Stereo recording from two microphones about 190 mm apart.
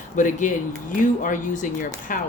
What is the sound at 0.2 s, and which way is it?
A woman's voice, 40° left (ahead or behind).